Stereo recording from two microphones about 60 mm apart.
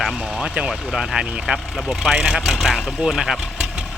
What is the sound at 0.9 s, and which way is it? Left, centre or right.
Speech, centre.